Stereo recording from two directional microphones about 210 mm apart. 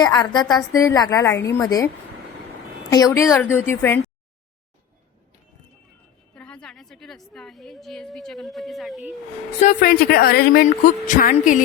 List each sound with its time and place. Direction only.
0.0 s a woman's voice: 20° left (ahead or behind)
2.9 s a woman's voice: 15° left (ahead or behind)
6.3 s a woman's voice: 5° left (ahead or behind)
9.6 s speech: 40° left (ahead or behind)